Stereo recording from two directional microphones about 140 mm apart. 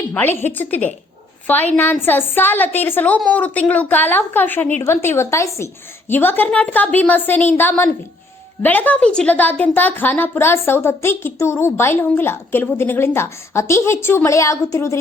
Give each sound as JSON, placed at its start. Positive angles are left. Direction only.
{"t": 0.1, "sound": "a woman's voice", "side_deg": 15}